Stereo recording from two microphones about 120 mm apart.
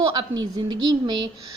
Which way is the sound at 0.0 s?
40° right (ahead or behind).